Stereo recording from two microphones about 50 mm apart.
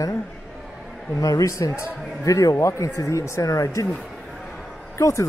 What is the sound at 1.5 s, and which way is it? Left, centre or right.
Speech, left.